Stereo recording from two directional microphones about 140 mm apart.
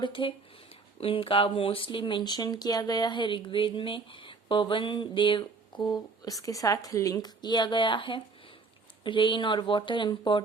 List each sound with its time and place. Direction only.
0.0 s speech: 35° left (ahead or behind)